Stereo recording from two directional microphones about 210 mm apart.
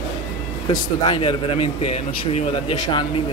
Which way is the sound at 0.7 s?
20° left (ahead or behind).